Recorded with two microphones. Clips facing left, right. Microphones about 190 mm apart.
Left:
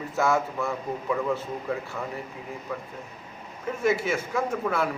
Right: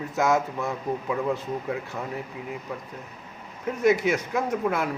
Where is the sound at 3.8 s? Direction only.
15° right (ahead or behind).